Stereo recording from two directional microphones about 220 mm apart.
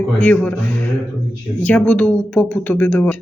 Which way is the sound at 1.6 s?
5° left (ahead or behind).